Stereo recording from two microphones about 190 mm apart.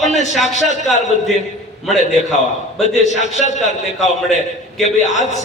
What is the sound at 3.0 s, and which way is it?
Speech, 35° left (ahead or behind).